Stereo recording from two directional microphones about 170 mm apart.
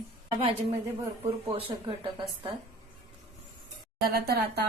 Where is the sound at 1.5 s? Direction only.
30° right (ahead or behind).